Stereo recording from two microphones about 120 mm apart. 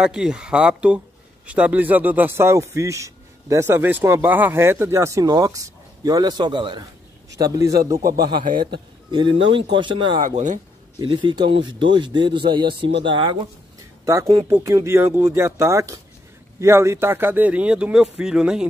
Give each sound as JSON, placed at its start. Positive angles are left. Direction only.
{"t": 0.0, "sound": "speech", "side_deg": -5}
{"t": 8.3, "sound": "speech", "side_deg": -40}
{"t": 10.2, "sound": "speech", "side_deg": -90}
{"t": 11.0, "sound": "speech", "side_deg": -40}
{"t": 14.5, "sound": "speech", "side_deg": -25}